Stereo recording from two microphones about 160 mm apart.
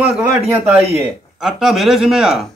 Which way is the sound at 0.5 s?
15° right (ahead or behind).